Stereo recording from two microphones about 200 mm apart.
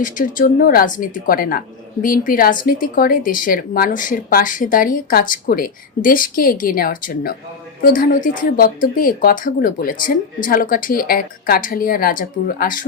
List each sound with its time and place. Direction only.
0.0 s speech: 40° left (ahead or behind)